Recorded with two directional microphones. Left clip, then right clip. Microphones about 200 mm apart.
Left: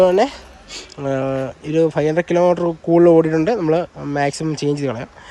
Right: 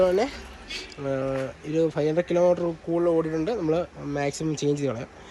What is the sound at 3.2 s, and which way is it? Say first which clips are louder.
Speech: left 10 dB; 20° left (ahead or behind).